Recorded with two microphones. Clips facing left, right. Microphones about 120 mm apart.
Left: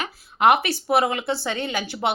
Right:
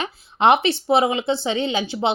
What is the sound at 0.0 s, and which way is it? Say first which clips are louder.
A woman's voice: right 1 dB; 25° right (ahead or behind).